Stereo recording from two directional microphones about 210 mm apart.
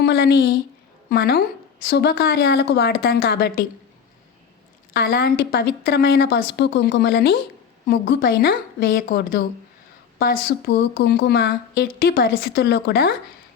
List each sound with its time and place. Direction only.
0.0 s a woman's voice: 50° left (ahead or behind)
4.9 s a woman's voice: 45° left (ahead or behind)